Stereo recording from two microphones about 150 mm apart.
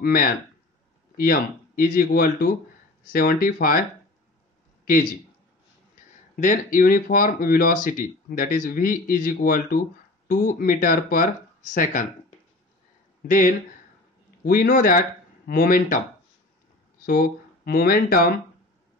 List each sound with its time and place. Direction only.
0.0 s speech: 70° left (ahead or behind)
6.3 s speech: 65° left (ahead or behind)
13.3 s speech: 65° left (ahead or behind)
14.4 s speech: 75° left (ahead or behind)
17.0 s speech: 85° left